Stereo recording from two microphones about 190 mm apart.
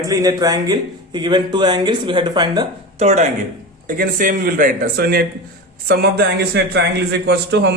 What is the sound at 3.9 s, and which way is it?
A man's voice, 45° right (ahead or behind).